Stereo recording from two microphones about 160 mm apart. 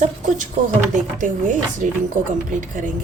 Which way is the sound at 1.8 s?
50° right (ahead or behind).